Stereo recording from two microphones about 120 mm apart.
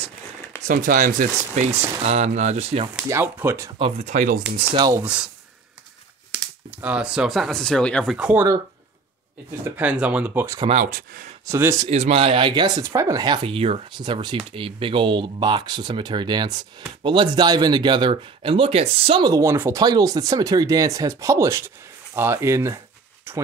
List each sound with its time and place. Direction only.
0.6 s speech: 90° right
2.0 s speech: 70° right (ahead or behind)
3.1 s speech: 20° right (ahead or behind)
3.7 s speech: 70° right (ahead or behind)
4.7 s speech: 35° right (ahead or behind)
5.0 s speech: 10° right (ahead or behind)
6.3 s speech: 10° right (ahead or behind); by 8.1 s 5° left (ahead or behind)
8.1 s speech: 5° right (ahead or behind)
9.7 s speech: 10° right (ahead or behind)
11.9 s speech: 60° right (ahead or behind)
13.9 s speech: 40° right (ahead or behind)
19.2 s speech: 25° right (ahead or behind)
19.8 s speech: 35° right (ahead or behind)